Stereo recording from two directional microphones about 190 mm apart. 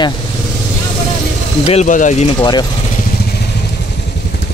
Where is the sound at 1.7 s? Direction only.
40° left (ahead or behind).